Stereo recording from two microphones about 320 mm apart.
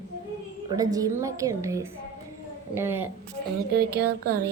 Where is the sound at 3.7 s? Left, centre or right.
Right.